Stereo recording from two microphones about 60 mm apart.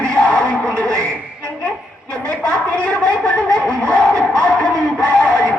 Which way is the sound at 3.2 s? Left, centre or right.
Centre.